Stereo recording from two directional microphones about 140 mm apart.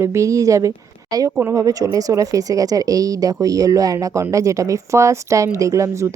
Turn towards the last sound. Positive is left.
turn(degrees=-20)  # may be behind; listen again after turning